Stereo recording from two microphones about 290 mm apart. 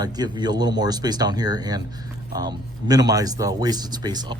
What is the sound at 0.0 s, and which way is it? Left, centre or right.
Speech, centre.